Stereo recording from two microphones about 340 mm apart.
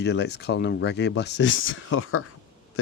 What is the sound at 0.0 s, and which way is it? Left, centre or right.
Speech, left.